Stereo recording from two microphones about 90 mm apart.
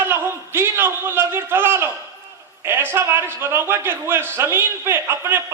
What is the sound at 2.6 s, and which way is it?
A man's voice, 25° right (ahead or behind).